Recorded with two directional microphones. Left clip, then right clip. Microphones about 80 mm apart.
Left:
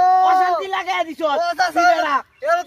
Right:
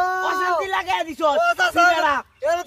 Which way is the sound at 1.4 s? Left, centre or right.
Centre.